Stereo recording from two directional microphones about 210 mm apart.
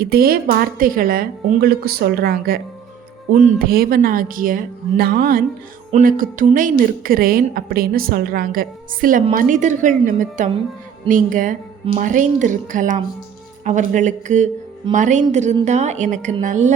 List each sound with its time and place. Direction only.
0.0 s a woman's voice: 45° right (ahead or behind)